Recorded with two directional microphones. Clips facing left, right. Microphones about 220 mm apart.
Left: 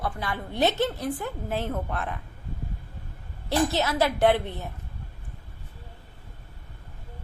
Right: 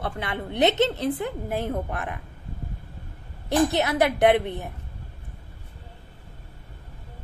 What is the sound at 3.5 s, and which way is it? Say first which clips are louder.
A woman's voice: right 3 dB; 20° right (ahead or behind).